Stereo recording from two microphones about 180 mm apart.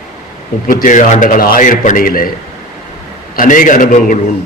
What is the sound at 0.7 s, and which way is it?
A man's voice, 45° left (ahead or behind).